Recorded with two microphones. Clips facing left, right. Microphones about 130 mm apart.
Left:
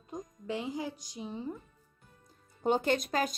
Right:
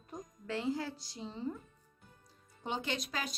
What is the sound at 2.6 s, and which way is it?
Speech, 45° left (ahead or behind).